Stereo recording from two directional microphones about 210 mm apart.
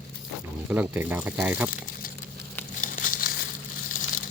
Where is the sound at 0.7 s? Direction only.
10° right (ahead or behind).